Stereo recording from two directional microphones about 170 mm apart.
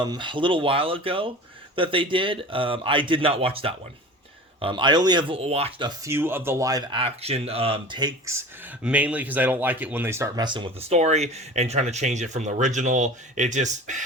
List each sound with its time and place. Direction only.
0.0 s speech: 25° right (ahead or behind)
6.1 s speech: 15° right (ahead or behind)
8.8 s speech: 5° right (ahead or behind); by 10.9 s 30° right (ahead or behind)
10.9 s speech: 40° right (ahead or behind)